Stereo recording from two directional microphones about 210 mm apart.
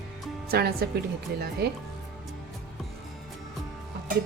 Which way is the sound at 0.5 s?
50° right (ahead or behind).